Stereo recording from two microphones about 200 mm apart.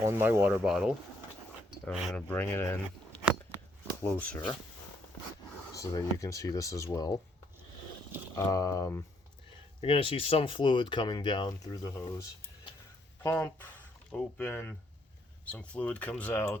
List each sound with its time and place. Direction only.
0.0 s speech: 10° right (ahead or behind); by 4.5 s 5° left (ahead or behind)
5.7 s speech: 15° left (ahead or behind)
8.4 s speech: 20° left (ahead or behind)
9.8 s speech: 25° left (ahead or behind)
13.2 s speech: 10° left (ahead or behind)